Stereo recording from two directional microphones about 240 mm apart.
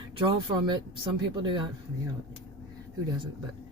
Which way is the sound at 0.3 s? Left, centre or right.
Centre.